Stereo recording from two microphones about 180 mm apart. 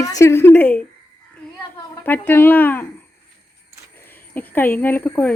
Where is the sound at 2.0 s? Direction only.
10° left (ahead or behind).